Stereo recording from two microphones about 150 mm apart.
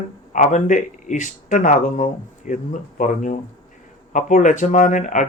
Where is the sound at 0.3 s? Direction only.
55° left (ahead or behind).